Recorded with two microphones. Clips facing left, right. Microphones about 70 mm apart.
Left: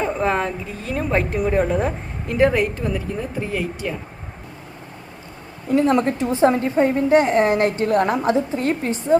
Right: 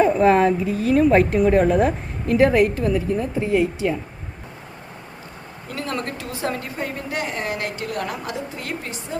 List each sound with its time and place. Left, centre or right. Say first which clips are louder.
0.0 s a woman's voice: right 6 dB; centre
5.6 s a woman's voice: left 11 dB; left